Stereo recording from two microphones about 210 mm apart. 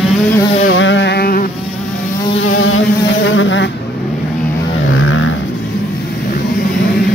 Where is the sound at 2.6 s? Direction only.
70° left (ahead or behind).